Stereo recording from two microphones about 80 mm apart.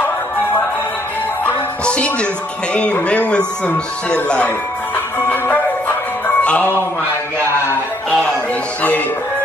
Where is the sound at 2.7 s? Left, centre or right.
Centre.